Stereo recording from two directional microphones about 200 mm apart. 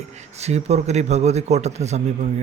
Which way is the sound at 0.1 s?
35° right (ahead or behind).